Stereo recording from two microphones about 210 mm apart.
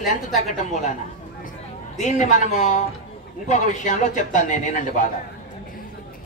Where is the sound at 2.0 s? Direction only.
35° left (ahead or behind).